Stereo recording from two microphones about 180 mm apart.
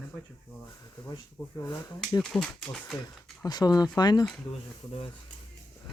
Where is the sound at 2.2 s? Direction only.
5° left (ahead or behind).